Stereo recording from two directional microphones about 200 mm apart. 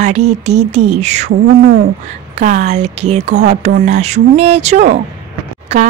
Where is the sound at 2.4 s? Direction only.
40° right (ahead or behind).